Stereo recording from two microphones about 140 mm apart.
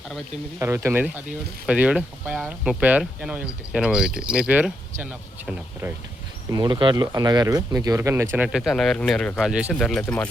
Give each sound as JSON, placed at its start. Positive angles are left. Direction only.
{"t": 0.6, "sound": "speech", "side_deg": -20}
{"t": 6.5, "sound": "speech", "side_deg": -30}
{"t": 8.5, "sound": "speech", "side_deg": 0}
{"t": 9.5, "sound": "speech", "side_deg": -10}
{"t": 9.7, "sound": "speech", "side_deg": 5}